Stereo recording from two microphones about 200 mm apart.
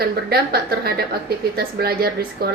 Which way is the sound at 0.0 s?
50° right (ahead or behind).